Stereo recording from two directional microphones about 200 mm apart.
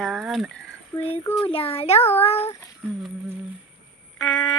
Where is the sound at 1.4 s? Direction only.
30° left (ahead or behind).